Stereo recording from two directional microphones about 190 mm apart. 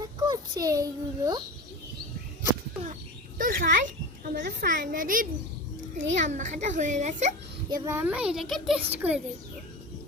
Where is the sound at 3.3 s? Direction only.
45° right (ahead or behind).